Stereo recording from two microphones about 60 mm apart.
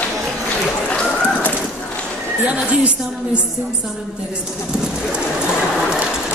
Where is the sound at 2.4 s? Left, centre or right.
Right.